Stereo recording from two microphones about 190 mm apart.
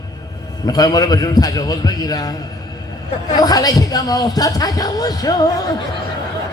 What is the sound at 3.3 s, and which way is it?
A man's voice, 20° left (ahead or behind).